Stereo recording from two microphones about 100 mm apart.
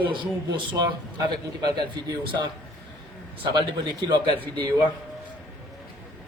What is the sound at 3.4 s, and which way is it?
Speech, 45° right (ahead or behind).